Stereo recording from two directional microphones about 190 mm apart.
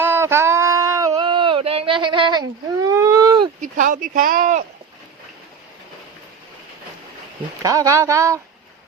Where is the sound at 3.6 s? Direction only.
45° right (ahead or behind).